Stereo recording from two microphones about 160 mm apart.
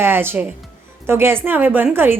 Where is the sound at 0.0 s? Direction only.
15° right (ahead or behind).